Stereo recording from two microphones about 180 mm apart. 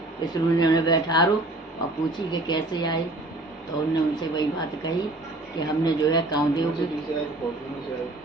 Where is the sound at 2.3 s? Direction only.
25° left (ahead or behind).